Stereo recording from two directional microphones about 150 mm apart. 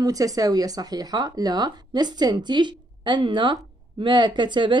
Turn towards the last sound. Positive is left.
turn(degrees=-30)  # may be behind; listen again after turning